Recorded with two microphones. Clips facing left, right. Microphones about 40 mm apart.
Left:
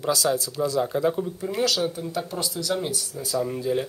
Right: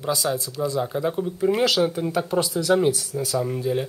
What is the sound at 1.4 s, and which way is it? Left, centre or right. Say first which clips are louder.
Speech: right 6 dB; right.